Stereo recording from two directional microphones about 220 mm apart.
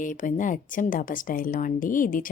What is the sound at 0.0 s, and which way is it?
Speech, 35° left (ahead or behind).